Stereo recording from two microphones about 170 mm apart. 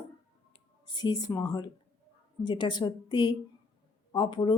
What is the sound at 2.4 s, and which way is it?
A woman's voice, 25° left (ahead or behind).